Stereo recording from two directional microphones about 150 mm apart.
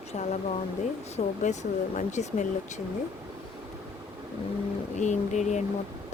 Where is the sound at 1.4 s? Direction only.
50° left (ahead or behind).